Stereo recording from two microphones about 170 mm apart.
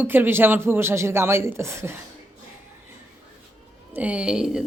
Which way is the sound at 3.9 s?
10° right (ahead or behind).